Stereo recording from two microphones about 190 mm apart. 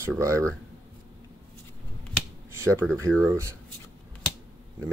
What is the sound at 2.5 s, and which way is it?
Speech, 15° right (ahead or behind).